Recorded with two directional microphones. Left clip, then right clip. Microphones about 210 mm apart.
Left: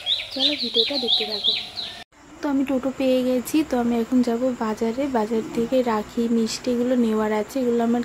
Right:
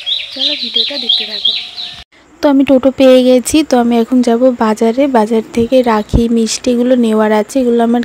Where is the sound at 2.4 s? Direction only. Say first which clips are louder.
Right 15 dB; 40° right (ahead or behind).